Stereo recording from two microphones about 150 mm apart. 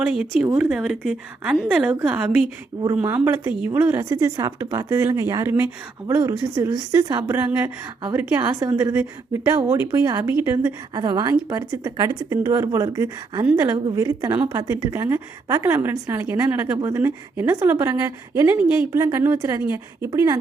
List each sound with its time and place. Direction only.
0.5 s a woman's voice: 5° right (ahead or behind)
10.9 s speech: 30° right (ahead or behind)
13.4 s a woman's voice: 15° right (ahead or behind)
13.7 s a woman's voice: 30° right (ahead or behind)